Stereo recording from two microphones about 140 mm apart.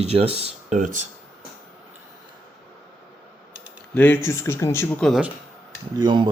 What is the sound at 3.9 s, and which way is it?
Speech, 15° left (ahead or behind).